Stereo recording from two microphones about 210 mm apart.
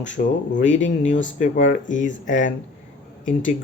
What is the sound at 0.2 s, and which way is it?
Speech, 40° left (ahead or behind).